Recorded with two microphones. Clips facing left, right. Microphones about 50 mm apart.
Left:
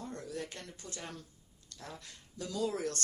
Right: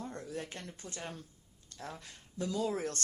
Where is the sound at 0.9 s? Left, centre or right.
Right.